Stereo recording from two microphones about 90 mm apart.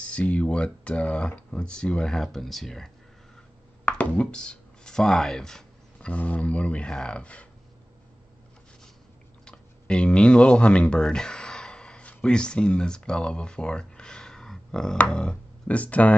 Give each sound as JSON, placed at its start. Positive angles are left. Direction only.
{"t": 0.0, "sound": "speech", "side_deg": 10}
{"t": 3.8, "sound": "speech", "side_deg": 15}
{"t": 9.4, "sound": "speech", "side_deg": 10}